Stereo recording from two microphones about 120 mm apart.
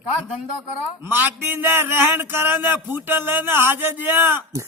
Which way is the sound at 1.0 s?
15° right (ahead or behind).